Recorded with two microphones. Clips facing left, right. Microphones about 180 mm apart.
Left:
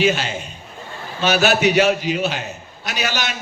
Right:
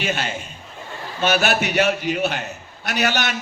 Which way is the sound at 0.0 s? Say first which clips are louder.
Left 6 dB; 55° right (ahead or behind).